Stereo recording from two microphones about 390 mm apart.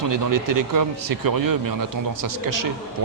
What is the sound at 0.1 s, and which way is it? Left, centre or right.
Speech, right.